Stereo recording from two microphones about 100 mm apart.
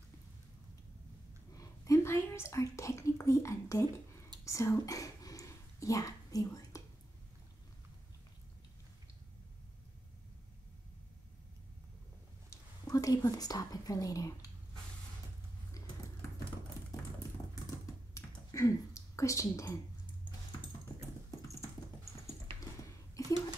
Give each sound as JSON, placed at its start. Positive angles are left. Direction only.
{"t": 1.5, "sound": "whispering", "side_deg": 35}
{"t": 12.4, "sound": "speech", "side_deg": 35}
{"t": 17.8, "sound": "computer keyboard", "side_deg": 30}